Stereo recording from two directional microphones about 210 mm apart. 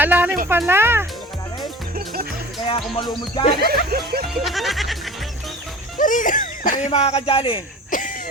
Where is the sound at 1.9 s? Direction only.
45° right (ahead or behind).